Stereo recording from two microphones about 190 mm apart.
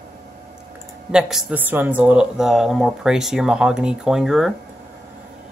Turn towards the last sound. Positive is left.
turn(degrees=0)  # may be behind; listen again after turning